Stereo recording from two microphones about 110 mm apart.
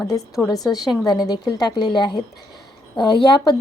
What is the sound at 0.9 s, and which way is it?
A woman's voice, 35° left (ahead or behind).